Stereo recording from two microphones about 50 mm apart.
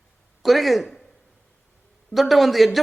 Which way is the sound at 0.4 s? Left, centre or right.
Centre.